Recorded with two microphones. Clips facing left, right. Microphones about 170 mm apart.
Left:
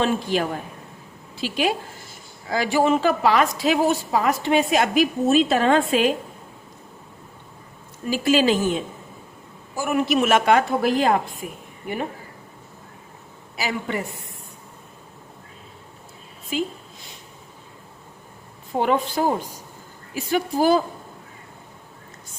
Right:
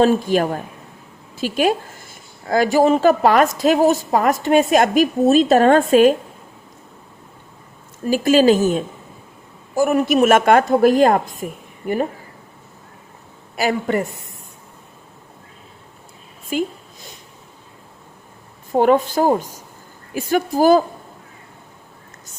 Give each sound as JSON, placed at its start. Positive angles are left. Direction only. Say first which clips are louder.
{"t": 0.0, "sound": "a woman's voice", "louder": "right 7 dB", "side_deg": -45}
{"t": 8.0, "sound": "a woman's voice", "louder": "right 6 dB", "side_deg": -45}
{"t": 13.6, "sound": "a woman's voice", "louder": "right 7 dB", "side_deg": -50}
{"t": 16.5, "sound": "a woman's voice", "louder": "right 4 dB", "side_deg": -50}
{"t": 18.8, "sound": "a woman's voice", "louder": "right 6 dB", "side_deg": -45}